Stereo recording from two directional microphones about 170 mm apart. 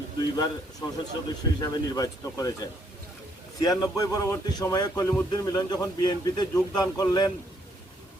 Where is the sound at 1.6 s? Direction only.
20° left (ahead or behind).